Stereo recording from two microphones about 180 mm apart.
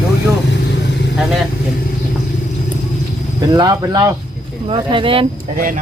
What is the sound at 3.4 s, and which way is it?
Speech, 20° right (ahead or behind).